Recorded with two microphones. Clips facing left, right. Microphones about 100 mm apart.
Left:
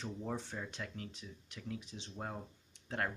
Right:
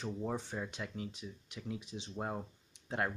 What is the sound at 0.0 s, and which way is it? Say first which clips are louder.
Speech: right 3 dB; 10° right (ahead or behind).